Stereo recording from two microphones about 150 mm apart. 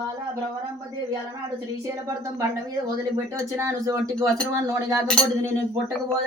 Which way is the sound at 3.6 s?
20° right (ahead or behind).